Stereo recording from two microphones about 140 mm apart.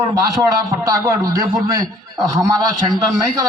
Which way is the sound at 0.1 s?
25° right (ahead or behind).